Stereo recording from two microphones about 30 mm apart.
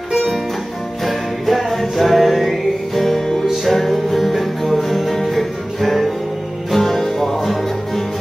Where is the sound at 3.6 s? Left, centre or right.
Centre.